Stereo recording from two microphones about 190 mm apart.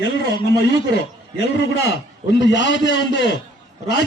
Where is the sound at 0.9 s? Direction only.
65° left (ahead or behind).